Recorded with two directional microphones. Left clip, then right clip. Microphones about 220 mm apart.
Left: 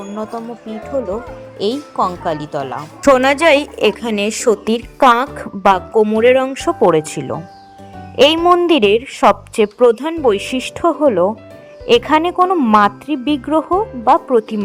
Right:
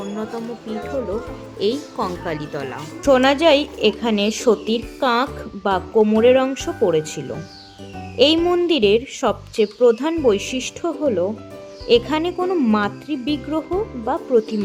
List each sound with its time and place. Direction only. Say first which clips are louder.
1.5 s a woman's voice: left 4 dB; 20° left (ahead or behind)
3.1 s a woman's voice: left 4 dB; 30° left (ahead or behind); by 14.6 s 15° left (ahead or behind)